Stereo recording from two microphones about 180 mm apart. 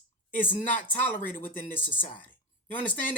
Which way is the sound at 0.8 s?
10° left (ahead or behind).